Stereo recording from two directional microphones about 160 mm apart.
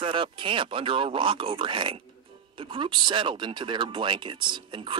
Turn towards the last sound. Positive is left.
turn(degrees=-30)  # may be behind; listen again after turning